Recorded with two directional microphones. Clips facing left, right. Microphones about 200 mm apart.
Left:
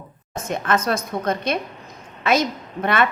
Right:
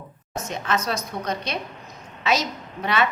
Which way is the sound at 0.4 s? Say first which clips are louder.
Left 5 dB; 55° left (ahead or behind).